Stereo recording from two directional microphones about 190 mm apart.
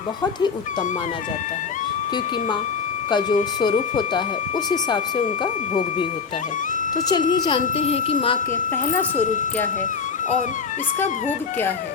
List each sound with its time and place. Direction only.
3.1 s speech: 25° left (ahead or behind)
7.1 s speech: 20° left (ahead or behind)
7.6 s speech: 35° left (ahead or behind)
9.1 s speech: 40° left (ahead or behind)